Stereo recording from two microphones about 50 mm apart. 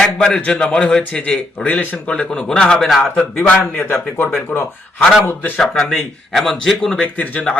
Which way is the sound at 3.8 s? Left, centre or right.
Left.